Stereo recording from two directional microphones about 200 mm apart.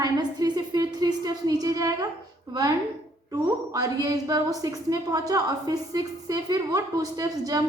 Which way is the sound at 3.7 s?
15° right (ahead or behind).